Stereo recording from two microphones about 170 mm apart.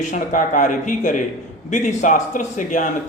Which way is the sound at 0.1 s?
50° left (ahead or behind).